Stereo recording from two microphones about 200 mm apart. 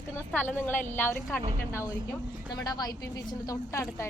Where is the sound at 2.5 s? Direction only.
20° left (ahead or behind).